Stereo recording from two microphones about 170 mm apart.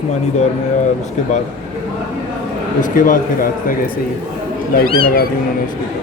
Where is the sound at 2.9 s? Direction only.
55° left (ahead or behind).